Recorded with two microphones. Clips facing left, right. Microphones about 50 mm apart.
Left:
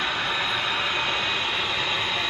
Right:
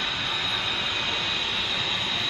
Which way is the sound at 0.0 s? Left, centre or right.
Left.